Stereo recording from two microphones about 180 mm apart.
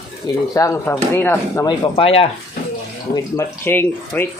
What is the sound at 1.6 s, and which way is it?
Speech, 25° left (ahead or behind).